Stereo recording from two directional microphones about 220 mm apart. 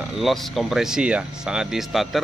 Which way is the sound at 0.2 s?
Centre (ahead or behind).